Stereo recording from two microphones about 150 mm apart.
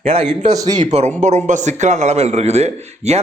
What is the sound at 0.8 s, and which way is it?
A man's voice, 45° right (ahead or behind).